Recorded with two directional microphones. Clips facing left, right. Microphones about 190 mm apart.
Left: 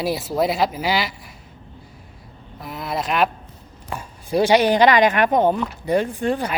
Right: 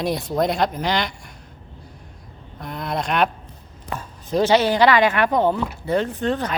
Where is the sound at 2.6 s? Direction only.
5° left (ahead or behind).